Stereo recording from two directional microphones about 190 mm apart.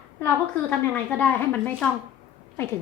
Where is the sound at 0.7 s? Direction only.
10° left (ahead or behind).